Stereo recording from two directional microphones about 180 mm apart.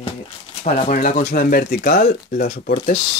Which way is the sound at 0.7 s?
45° left (ahead or behind).